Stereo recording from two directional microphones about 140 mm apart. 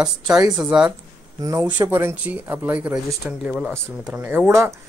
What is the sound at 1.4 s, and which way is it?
Speech, 25° right (ahead or behind).